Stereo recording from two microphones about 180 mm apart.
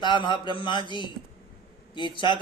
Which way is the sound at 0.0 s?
25° left (ahead or behind).